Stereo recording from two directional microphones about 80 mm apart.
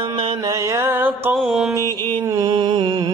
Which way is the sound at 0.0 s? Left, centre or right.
Right.